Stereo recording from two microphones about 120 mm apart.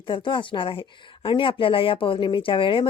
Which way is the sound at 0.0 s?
40° left (ahead or behind).